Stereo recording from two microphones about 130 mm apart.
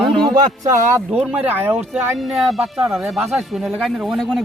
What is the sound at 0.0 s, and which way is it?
Music, 5° left (ahead or behind).